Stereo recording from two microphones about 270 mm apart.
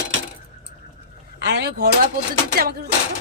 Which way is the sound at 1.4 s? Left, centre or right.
Right.